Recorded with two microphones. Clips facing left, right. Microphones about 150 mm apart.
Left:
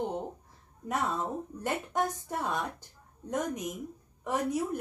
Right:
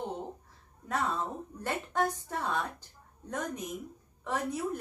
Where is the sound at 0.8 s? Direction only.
15° left (ahead or behind).